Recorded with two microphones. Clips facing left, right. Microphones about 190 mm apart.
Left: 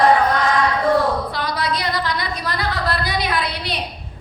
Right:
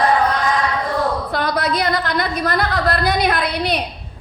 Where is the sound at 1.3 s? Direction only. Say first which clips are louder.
Right 4 dB; 50° right (ahead or behind).